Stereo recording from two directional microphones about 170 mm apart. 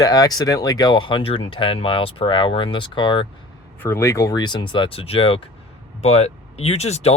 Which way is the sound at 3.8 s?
15° left (ahead or behind).